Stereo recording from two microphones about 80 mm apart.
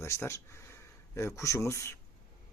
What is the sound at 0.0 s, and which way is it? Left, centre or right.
Speech, left.